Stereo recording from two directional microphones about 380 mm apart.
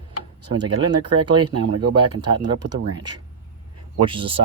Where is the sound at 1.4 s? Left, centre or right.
Right.